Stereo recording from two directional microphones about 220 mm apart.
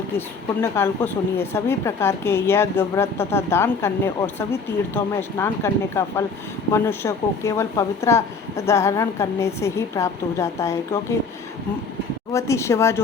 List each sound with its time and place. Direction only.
0.6 s speech: 10° left (ahead or behind)
12.3 s speech: 15° left (ahead or behind)